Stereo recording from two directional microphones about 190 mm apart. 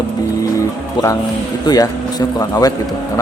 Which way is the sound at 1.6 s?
20° left (ahead or behind).